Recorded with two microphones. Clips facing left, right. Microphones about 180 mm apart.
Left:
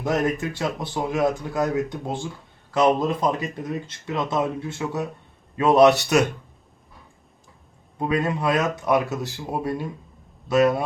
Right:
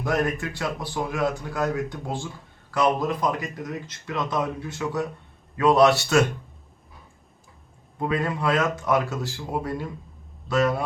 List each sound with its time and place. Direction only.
0.0 s speech: 20° left (ahead or behind)
7.9 s speech: 20° left (ahead or behind)